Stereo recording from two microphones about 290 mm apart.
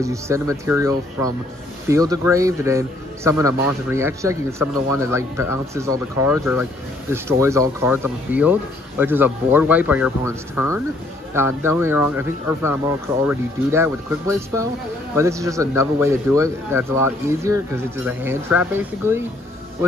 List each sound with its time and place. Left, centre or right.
0.0 s a man's voice: centre